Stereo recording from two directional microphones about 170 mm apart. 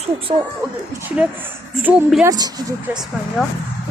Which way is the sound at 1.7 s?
5° right (ahead or behind).